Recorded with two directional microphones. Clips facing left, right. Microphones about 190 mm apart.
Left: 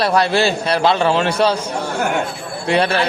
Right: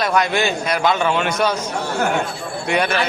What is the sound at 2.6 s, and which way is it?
Speech, 30° left (ahead or behind).